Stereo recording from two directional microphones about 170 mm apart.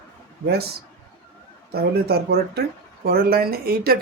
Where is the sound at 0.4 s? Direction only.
70° right (ahead or behind).